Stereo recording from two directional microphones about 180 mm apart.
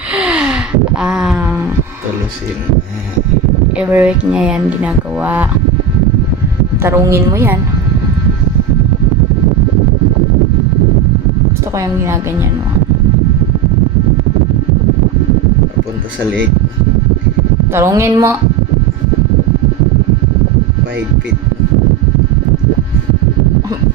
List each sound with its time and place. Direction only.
0.1 s gasp: 5° right (ahead or behind)
3.8 s speech: 10° right (ahead or behind)
6.8 s speech: 15° right (ahead or behind)
11.8 s speech: 15° right (ahead or behind)
17.7 s speech: 15° right (ahead or behind)